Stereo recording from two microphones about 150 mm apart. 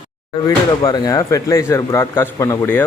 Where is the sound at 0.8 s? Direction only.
25° left (ahead or behind).